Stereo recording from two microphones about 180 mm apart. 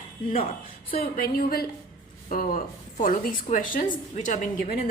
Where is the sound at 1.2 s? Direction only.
55° left (ahead or behind).